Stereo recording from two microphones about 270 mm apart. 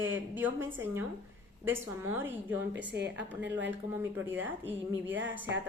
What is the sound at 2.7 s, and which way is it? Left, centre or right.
Speech, right.